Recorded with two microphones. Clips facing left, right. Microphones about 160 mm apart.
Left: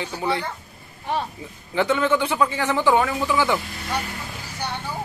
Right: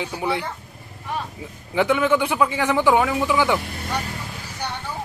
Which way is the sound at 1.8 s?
10° right (ahead or behind).